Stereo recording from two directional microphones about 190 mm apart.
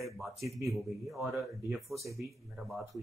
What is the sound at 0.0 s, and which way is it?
Speech, centre (ahead or behind).